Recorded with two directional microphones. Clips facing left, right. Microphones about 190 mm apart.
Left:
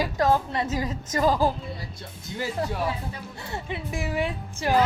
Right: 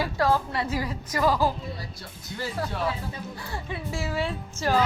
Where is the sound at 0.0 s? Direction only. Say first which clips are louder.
Left 2 dB; 20° left (ahead or behind).